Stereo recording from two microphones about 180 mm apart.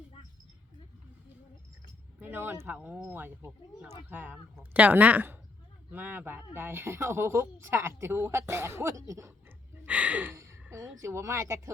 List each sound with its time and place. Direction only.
2.1 s speech: 10° right (ahead or behind)
9.8 s gasp: 5° right (ahead or behind)
11.0 s speech: 15° right (ahead or behind)